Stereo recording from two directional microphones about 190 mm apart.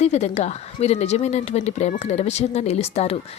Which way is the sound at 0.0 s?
35° left (ahead or behind).